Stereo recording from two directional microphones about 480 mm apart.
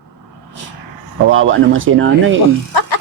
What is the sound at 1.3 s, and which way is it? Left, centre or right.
A man's voice, right.